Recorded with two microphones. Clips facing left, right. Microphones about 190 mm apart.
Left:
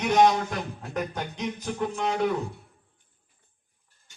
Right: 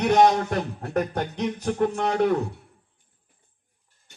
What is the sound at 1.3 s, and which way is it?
A man's voice, 65° right (ahead or behind).